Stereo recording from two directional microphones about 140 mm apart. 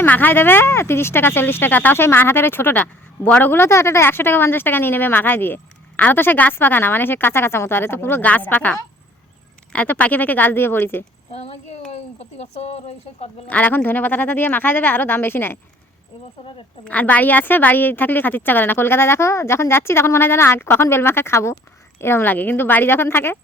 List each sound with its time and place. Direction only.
0.0 s speech: 15° left (ahead or behind)
9.7 s speech: 10° left (ahead or behind)
11.3 s a child's voice: 45° left (ahead or behind)
13.5 s speech: 10° left (ahead or behind)
16.8 s speech: 10° left (ahead or behind)